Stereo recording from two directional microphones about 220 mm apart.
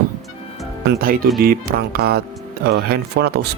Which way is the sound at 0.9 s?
40° right (ahead or behind).